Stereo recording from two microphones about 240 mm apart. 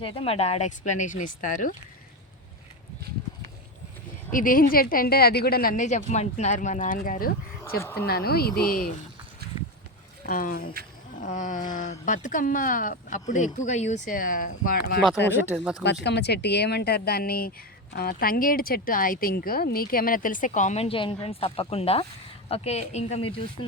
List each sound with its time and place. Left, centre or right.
0.0 s speech: left
4.3 s speech: left
7.8 s speech: centre
8.0 s speech: left
9.4 s a sound: right
10.2 s speech: left
15.4 s speech: centre
16.0 s speech: left